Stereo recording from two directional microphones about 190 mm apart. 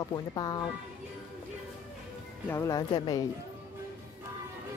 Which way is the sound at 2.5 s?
15° left (ahead or behind).